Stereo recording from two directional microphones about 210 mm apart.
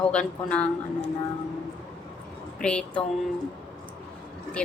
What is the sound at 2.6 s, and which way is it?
Speech, 5° left (ahead or behind).